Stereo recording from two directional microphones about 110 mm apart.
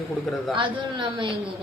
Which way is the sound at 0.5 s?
45° right (ahead or behind).